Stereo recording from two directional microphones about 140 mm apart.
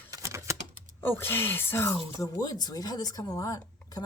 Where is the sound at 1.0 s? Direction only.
15° left (ahead or behind).